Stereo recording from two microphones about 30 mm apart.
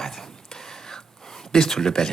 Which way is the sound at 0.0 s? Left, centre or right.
Centre.